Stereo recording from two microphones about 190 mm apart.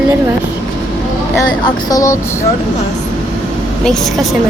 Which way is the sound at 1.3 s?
20° left (ahead or behind).